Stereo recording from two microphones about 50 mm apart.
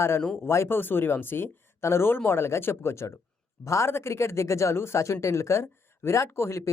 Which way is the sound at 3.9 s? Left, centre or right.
Left.